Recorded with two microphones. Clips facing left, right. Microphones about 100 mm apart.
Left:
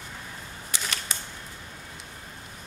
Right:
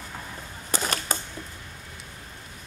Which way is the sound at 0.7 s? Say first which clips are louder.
Right 7 dB; 40° right (ahead or behind).